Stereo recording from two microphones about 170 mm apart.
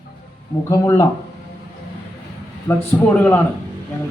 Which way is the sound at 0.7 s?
20° left (ahead or behind).